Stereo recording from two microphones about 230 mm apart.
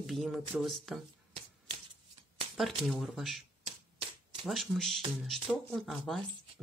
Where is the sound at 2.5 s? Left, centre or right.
Centre.